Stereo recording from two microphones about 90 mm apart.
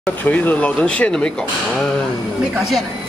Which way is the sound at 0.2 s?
15° left (ahead or behind).